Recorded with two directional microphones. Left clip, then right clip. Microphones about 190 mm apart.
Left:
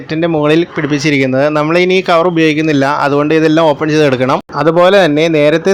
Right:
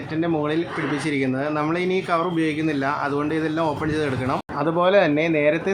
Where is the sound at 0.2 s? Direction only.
45° left (ahead or behind).